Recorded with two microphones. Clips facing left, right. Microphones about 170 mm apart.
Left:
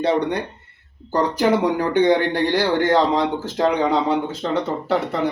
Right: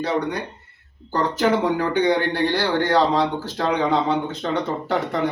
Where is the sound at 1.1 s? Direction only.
15° left (ahead or behind).